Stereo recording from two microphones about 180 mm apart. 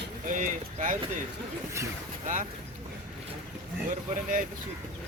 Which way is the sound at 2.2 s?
45° right (ahead or behind).